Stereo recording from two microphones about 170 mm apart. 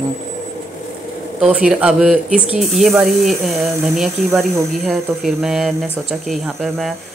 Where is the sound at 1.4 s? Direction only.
5° right (ahead or behind).